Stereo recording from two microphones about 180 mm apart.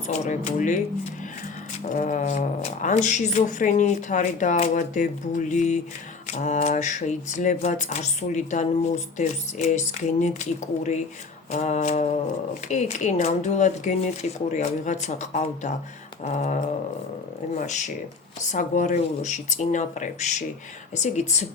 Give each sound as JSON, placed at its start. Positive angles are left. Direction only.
{"t": 0.1, "sound": "speech", "side_deg": 40}
{"t": 1.9, "sound": "speech", "side_deg": 45}